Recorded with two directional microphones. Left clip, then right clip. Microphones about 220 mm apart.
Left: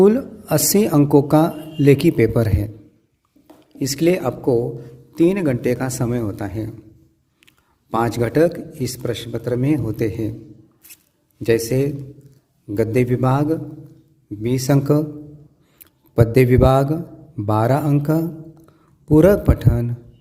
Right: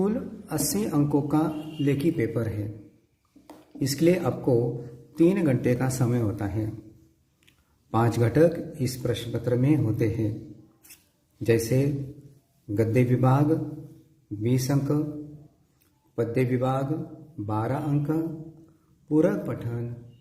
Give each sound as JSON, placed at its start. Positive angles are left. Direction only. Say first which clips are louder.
{"t": 0.0, "sound": "a man's voice", "louder": "left 14 dB", "side_deg": 45}
{"t": 3.8, "sound": "a man's voice", "louder": "left 5 dB", "side_deg": 45}
{"t": 11.4, "sound": "a man's voice", "louder": "left 6 dB", "side_deg": 50}